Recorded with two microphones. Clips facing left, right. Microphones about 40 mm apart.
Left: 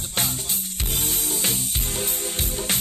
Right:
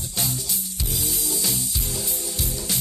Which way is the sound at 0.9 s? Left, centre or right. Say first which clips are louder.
Left 1 dB; left.